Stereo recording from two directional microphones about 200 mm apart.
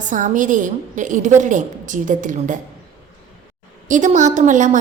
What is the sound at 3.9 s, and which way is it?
Speech, 40° right (ahead or behind).